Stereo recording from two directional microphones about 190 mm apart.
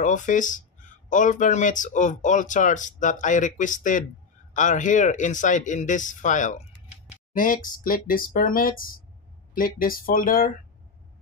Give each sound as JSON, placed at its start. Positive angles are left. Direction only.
{"t": 0.0, "sound": "speech", "side_deg": 40}